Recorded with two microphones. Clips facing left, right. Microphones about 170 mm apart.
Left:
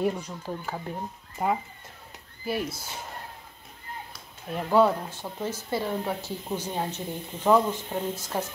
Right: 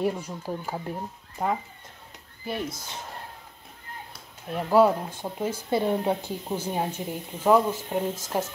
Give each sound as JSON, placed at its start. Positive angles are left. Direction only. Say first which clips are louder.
{"t": 0.0, "sound": "speech", "louder": "even", "side_deg": -10}
{"t": 1.4, "sound": "speech", "louder": "left 1 dB", "side_deg": 5}
{"t": 4.5, "sound": "speech", "louder": "right 2 dB", "side_deg": -5}
{"t": 6.4, "sound": "speech", "louder": "even", "side_deg": -10}